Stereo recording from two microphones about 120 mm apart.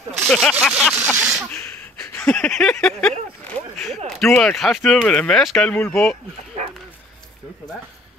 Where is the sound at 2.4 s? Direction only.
5° left (ahead or behind).